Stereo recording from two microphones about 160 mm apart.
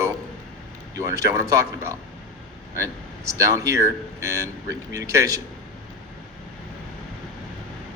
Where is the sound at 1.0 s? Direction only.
20° right (ahead or behind).